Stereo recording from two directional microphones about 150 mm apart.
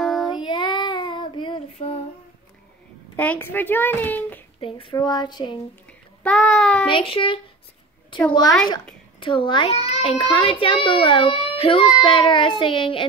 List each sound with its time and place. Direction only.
0.0 s child singing: centre (ahead or behind)
0.3 s child singing: 30° left (ahead or behind)
3.2 s a child's voice: 10° left (ahead or behind)
4.6 s a child's voice: 35° left (ahead or behind)
6.2 s child singing: 5° left (ahead or behind)
6.9 s a child's voice: 35° left (ahead or behind)